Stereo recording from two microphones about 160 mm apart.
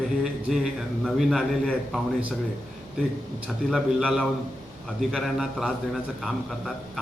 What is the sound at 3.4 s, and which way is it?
A man's voice, 5° right (ahead or behind).